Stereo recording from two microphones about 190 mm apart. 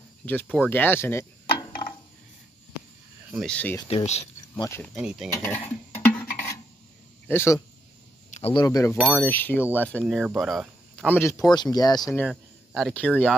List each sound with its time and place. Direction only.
0.2 s speech: 10° left (ahead or behind)
3.4 s speech: 10° left (ahead or behind)
3.9 s speech: 35° left (ahead or behind)
4.6 s speech: 15° left (ahead or behind)
4.9 s speech: 5° right (ahead or behind)
5.3 s dishes: 10° left (ahead or behind)
7.2 s speech: 15° left (ahead or behind)
8.3 s a sound: 30° left (ahead or behind)
8.6 s speech: 15° left (ahead or behind)
8.9 s speech: centre (ahead or behind)
9.2 s speech: 10° left (ahead or behind)
11.1 s speech: 15° left (ahead or behind)
12.0 s speech: centre (ahead or behind)